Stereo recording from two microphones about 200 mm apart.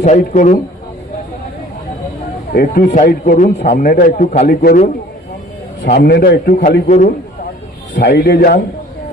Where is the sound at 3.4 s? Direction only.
35° left (ahead or behind); by 6.5 s 55° left (ahead or behind).